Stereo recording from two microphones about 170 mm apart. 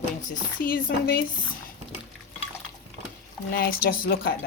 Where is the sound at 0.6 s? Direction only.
60° left (ahead or behind).